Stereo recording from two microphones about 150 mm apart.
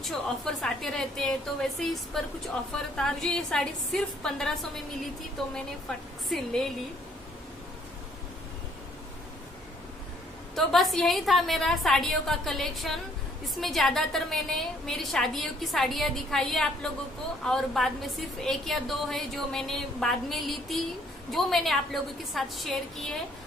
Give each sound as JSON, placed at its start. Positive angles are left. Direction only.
{"t": 0.0, "sound": "a woman's voice", "side_deg": 5}
{"t": 10.5, "sound": "a woman's voice", "side_deg": 0}